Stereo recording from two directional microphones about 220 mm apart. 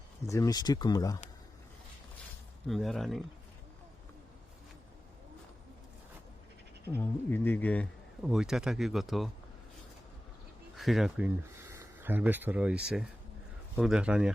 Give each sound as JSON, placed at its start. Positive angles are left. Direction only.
{"t": 0.3, "sound": "speech", "side_deg": 15}
{"t": 2.6, "sound": "speech", "side_deg": 0}
{"t": 6.8, "sound": "speech", "side_deg": 10}
{"t": 10.8, "sound": "speech", "side_deg": 0}